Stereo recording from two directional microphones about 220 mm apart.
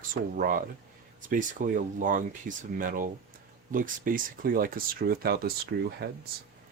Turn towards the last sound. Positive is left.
turn(degrees=-45)  # may be behind; listen again after turning